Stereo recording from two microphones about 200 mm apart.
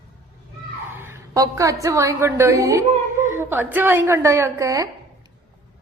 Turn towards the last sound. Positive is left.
turn(degrees=-15)  # may be behind; listen again after turning